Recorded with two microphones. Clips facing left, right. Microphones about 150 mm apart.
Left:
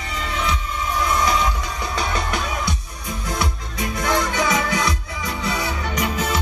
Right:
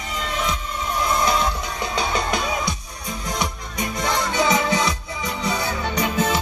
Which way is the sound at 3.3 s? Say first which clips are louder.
Left 1 dB; 20° right (ahead or behind).